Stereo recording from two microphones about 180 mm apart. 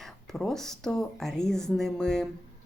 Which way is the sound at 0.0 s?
Centre (ahead or behind).